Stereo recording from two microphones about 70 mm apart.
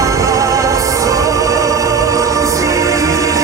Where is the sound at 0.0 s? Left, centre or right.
Right.